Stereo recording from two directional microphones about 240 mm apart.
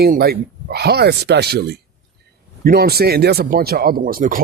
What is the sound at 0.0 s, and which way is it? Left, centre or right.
Speech, right.